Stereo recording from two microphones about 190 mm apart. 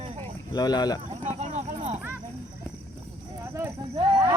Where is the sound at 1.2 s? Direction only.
35° right (ahead or behind).